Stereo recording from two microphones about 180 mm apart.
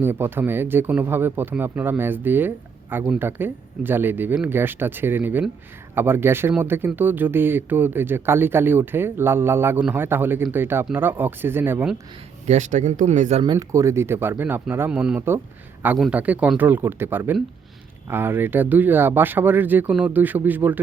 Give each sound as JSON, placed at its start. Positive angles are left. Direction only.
{"t": 0.0, "sound": "speech", "side_deg": -10}
{"t": 12.5, "sound": "speech", "side_deg": -40}
{"t": 13.4, "sound": "speech", "side_deg": -20}